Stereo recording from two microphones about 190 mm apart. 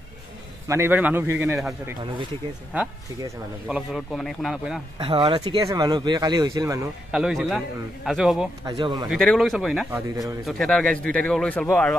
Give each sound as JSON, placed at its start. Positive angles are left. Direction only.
{"t": 0.7, "sound": "a man's voice", "side_deg": -15}
{"t": 2.7, "sound": "a man's voice", "side_deg": -10}
{"t": 4.9, "sound": "speech", "side_deg": -25}
{"t": 7.1, "sound": "speech", "side_deg": 0}
{"t": 8.6, "sound": "speech", "side_deg": -25}
{"t": 9.1, "sound": "speech", "side_deg": 0}